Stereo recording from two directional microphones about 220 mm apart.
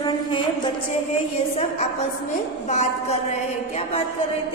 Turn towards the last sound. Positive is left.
turn(degrees=30)  # may be behind; listen again after turning